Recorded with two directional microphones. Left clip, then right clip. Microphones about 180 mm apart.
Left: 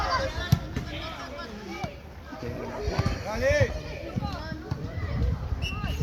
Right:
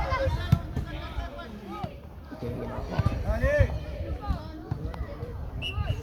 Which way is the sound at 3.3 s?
50° left (ahead or behind).